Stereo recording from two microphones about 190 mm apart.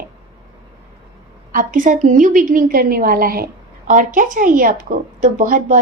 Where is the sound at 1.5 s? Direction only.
45° right (ahead or behind).